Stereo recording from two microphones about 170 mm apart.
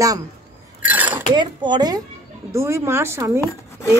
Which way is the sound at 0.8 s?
10° right (ahead or behind).